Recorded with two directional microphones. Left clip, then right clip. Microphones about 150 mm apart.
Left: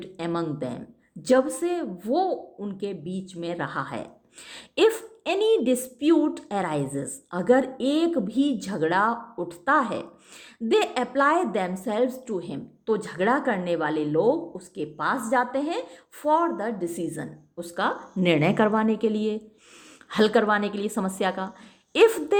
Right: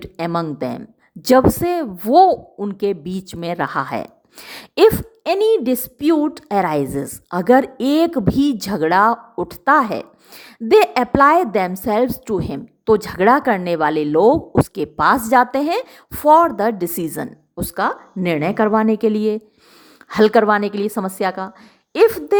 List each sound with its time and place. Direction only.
0.0 s a woman's voice: 50° right (ahead or behind)
17.8 s a woman's voice: 30° right (ahead or behind)
18.7 s a woman's voice: 40° right (ahead or behind)